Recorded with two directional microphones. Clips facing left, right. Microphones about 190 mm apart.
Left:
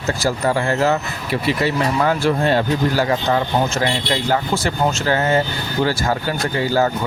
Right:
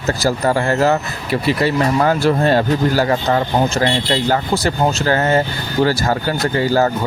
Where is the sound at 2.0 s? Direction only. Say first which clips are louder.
Right 1 dB; 40° right (ahead or behind).